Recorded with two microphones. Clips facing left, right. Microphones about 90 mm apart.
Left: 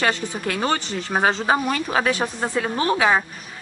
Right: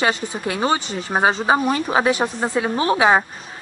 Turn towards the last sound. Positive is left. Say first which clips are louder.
# right 3 dB
turn(degrees=-25)  # may be behind; listen again after turning